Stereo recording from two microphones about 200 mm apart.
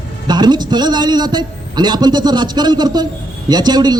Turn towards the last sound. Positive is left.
turn(degrees=-20)  # may be behind; listen again after turning